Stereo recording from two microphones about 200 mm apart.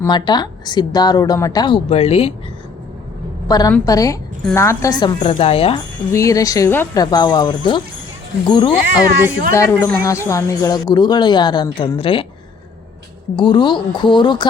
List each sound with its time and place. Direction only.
0.0 s a woman's voice: 20° left (ahead or behind)
3.7 s a woman's voice: 15° left (ahead or behind)
6.1 s a woman's voice: 15° left (ahead or behind)
13.3 s a woman's voice: 25° left (ahead or behind)